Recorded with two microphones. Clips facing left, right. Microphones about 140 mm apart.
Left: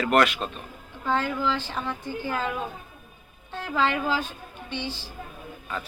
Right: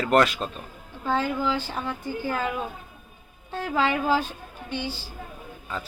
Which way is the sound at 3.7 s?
10° right (ahead or behind).